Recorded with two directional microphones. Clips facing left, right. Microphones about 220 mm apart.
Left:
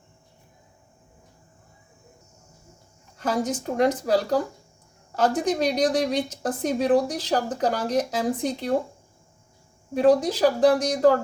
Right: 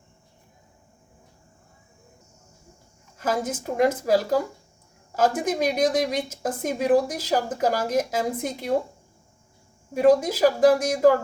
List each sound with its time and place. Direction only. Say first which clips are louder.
3.2 s speech: left 1 dB; 5° right (ahead or behind)
9.9 s speech: even; 10° right (ahead or behind)